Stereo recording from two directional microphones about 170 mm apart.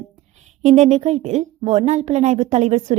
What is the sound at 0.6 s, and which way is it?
A woman's voice, 45° right (ahead or behind).